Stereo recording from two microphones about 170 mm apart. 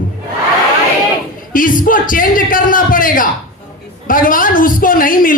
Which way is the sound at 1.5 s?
55° left (ahead or behind).